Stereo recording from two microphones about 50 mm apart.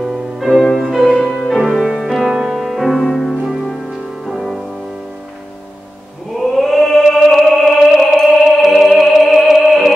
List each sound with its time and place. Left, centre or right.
0.0 s music: centre
2.3 s music: centre
2.6 s music: centre
6.3 s chant: centre
7.5 s music: centre